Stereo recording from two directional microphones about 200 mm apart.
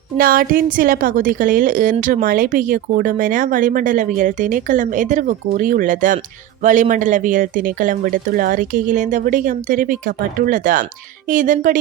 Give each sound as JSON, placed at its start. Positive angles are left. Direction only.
{"t": 0.2, "sound": "a woman's voice", "side_deg": -45}